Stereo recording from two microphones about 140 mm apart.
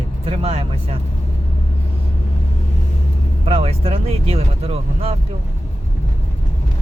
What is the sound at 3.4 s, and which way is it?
Speech, 45° right (ahead or behind).